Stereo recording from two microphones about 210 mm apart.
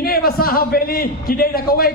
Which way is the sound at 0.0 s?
45° left (ahead or behind).